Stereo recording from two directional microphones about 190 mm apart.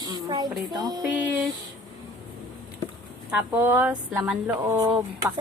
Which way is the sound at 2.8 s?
20° left (ahead or behind).